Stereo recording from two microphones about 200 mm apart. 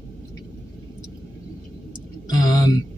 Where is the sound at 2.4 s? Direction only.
20° left (ahead or behind).